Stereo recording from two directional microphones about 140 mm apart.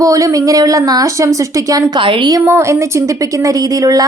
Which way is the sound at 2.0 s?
35° right (ahead or behind).